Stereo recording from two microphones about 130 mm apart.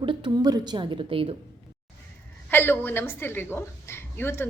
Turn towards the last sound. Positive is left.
turn(degrees=15)  # may be behind; listen again after turning